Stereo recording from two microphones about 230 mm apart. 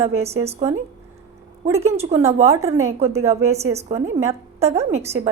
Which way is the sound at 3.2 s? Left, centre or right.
Right.